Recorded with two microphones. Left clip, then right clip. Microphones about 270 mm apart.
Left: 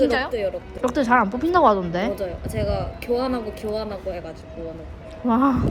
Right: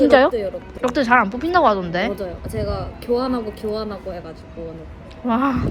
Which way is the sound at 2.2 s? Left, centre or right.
Centre.